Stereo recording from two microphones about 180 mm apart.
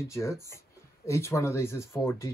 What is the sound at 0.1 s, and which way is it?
Speech, 15° left (ahead or behind).